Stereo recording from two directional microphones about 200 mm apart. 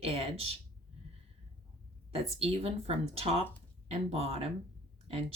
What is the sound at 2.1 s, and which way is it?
A woman's voice, 30° right (ahead or behind).